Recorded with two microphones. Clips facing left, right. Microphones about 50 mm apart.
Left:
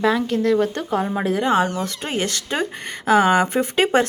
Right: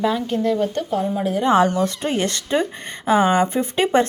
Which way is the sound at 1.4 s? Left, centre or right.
Left.